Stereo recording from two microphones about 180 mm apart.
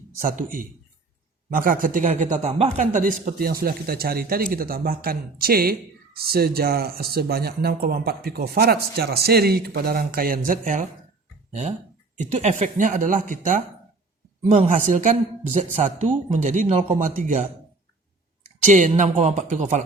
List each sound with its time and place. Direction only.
0.2 s speech: 45° right (ahead or behind)
12.1 s speech: 40° right (ahead or behind)
18.9 s speech: 40° right (ahead or behind)